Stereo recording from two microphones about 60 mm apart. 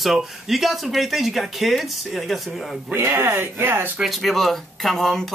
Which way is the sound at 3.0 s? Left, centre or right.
Right.